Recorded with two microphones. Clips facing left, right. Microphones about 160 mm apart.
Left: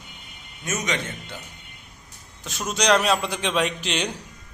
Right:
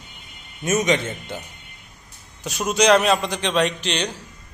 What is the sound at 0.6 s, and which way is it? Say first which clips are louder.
Speech: right 8 dB; 25° right (ahead or behind).